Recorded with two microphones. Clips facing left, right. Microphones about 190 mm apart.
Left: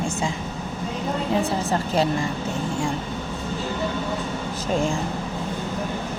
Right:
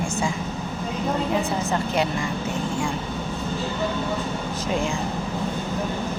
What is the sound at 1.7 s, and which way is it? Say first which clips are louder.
Speech: left 1 dB; 35° left (ahead or behind).